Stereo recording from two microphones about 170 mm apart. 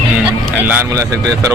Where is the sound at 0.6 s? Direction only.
10° right (ahead or behind).